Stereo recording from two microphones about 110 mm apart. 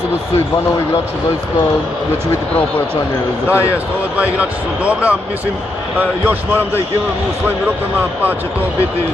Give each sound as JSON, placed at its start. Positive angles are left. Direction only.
{"t": 3.4, "sound": "speech", "side_deg": 20}
{"t": 4.2, "sound": "speech", "side_deg": -10}